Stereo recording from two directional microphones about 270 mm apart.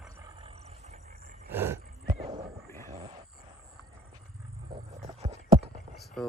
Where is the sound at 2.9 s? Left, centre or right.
Right.